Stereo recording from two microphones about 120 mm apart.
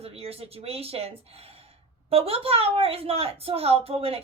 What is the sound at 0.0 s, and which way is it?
Speech, 55° right (ahead or behind).